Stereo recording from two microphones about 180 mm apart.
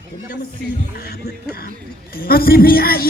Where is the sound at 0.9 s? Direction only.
60° left (ahead or behind).